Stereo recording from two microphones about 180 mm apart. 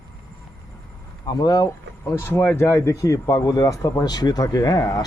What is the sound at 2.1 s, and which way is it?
Speech, 10° left (ahead or behind).